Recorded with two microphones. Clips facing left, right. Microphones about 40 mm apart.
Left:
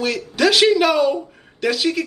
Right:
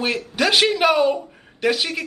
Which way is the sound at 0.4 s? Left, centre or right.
Right.